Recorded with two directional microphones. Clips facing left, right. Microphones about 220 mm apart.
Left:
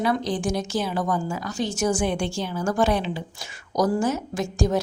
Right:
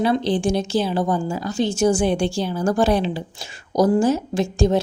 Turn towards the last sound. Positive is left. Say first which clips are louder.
# right 5 dB
turn(degrees=-25)  # may be behind; listen again after turning